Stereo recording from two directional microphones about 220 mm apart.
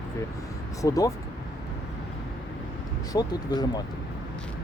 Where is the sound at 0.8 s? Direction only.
15° left (ahead or behind).